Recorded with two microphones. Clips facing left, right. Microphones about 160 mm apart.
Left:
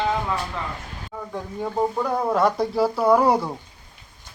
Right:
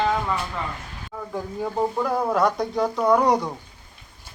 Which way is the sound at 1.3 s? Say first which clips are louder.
Even; centre (ahead or behind).